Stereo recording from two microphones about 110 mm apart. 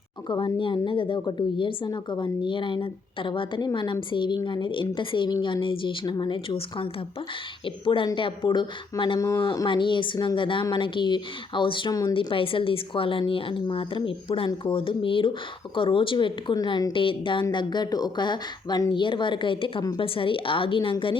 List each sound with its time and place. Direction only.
0.3 s a woman's voice: 45° left (ahead or behind)